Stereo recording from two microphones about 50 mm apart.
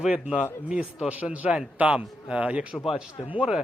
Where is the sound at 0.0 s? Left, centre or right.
Right.